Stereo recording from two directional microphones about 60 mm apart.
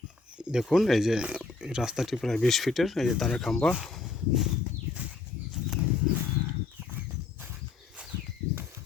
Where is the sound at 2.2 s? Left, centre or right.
Centre.